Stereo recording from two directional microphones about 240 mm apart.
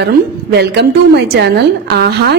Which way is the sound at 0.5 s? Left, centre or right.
Right.